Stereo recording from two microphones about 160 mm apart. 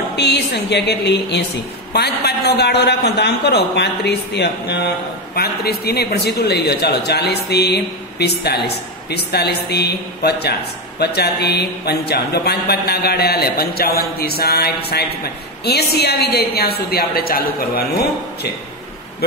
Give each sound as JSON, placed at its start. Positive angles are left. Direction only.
{"t": 0.1, "sound": "a man's voice", "side_deg": 90}
{"t": 5.3, "sound": "a man's voice", "side_deg": 80}